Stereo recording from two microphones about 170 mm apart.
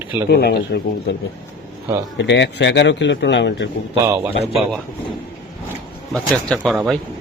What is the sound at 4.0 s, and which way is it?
Speech, 20° right (ahead or behind).